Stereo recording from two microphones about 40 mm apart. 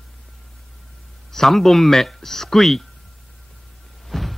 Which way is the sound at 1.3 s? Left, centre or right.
Centre.